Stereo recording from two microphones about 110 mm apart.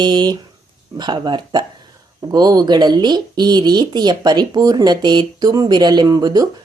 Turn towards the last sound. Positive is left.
turn(degrees=-40)  # may be behind; listen again after turning